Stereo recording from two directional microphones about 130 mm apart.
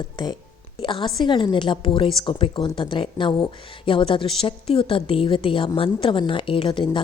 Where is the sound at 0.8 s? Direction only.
40° left (ahead or behind).